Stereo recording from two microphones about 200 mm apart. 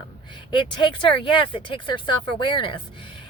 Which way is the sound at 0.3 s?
25° left (ahead or behind).